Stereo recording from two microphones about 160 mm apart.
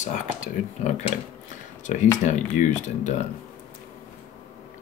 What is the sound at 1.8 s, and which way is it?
Speech, 50° left (ahead or behind).